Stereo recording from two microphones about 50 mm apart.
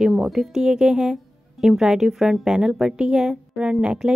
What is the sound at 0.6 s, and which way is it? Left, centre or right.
A woman's voice, centre.